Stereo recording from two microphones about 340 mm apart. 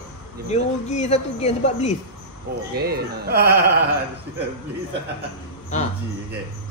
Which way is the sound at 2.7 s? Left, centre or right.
Right.